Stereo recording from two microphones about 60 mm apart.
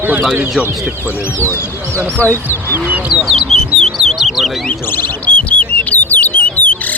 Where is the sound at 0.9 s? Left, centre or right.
Right.